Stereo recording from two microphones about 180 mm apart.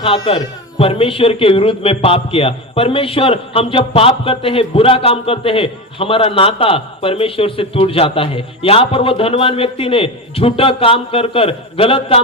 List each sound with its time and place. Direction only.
0.0 s speech: 30° left (ahead or behind)